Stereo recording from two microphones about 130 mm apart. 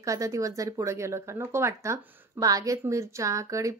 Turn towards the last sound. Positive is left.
turn(degrees=-25)  # may be behind; listen again after turning